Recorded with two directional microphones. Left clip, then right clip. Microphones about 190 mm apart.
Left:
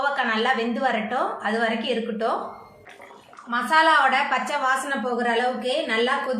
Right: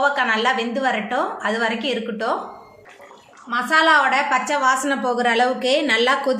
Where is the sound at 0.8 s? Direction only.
30° right (ahead or behind).